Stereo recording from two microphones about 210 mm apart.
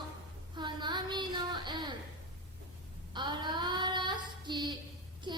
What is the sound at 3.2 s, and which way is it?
Child singing, 20° right (ahead or behind).